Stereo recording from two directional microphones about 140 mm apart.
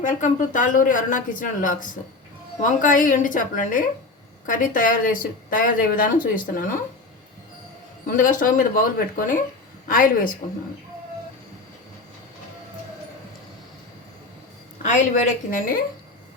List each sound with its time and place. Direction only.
0.0 s a woman's voice: 65° left (ahead or behind); by 6.7 s 80° left
8.0 s a woman's voice: 75° left (ahead or behind)
15.4 s speech: 80° left